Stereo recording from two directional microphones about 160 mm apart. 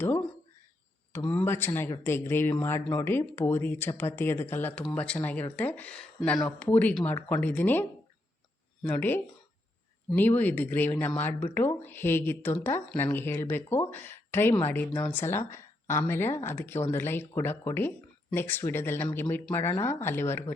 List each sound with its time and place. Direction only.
1.1 s speech: 5° left (ahead or behind)